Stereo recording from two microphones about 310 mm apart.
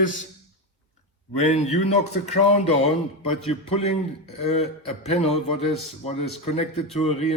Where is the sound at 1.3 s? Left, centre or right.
Left.